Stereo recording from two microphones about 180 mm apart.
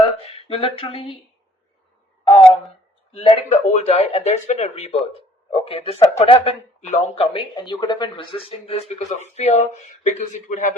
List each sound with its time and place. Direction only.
0.4 s speech: 30° left (ahead or behind)
2.2 s speech: 30° left (ahead or behind); by 10.8 s 45° left (ahead or behind)